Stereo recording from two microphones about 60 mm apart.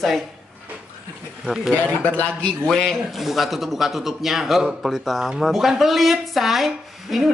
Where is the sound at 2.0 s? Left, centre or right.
Left.